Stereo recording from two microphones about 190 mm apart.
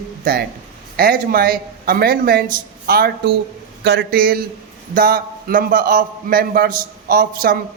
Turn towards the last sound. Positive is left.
turn(degrees=-50)  # may be behind; listen again after turning